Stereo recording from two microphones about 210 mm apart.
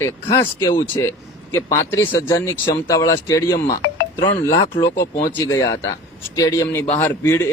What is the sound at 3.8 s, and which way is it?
Music, 60° left (ahead or behind).